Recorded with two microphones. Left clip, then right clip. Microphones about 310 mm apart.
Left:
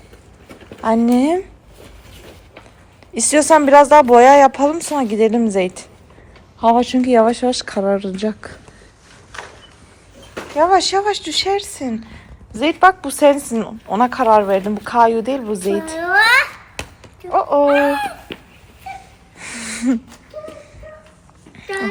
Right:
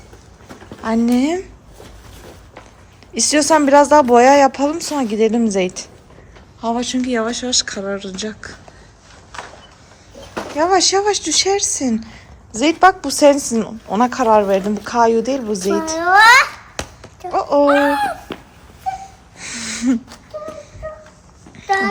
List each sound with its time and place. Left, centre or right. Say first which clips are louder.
0.8 s a woman's voice: left 2 dB; centre
3.2 s a woman's voice: left 2 dB; centre
10.6 s a woman's voice: left 1 dB; centre
16.0 s a sound: right 4 dB; centre
17.3 s music: even; centre
19.4 s a sound: right 1 dB; centre